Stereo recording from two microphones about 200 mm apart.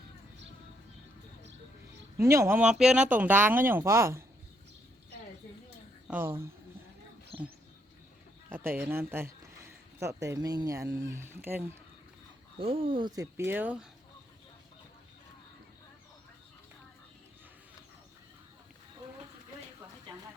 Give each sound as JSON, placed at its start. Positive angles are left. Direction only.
{"t": 2.1, "sound": "speech", "side_deg": -15}
{"t": 6.1, "sound": "speech", "side_deg": -10}
{"t": 8.4, "sound": "speech", "side_deg": -10}
{"t": 12.5, "sound": "speech", "side_deg": -25}